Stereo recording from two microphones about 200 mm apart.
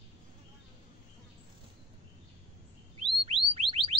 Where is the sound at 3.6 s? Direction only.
30° right (ahead or behind).